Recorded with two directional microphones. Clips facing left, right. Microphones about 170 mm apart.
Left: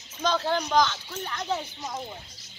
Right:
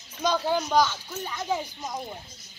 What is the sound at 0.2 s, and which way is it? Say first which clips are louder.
Speech: right 1 dB; 10° right (ahead or behind).